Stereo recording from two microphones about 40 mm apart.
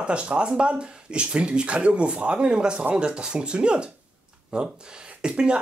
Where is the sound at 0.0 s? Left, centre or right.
Right.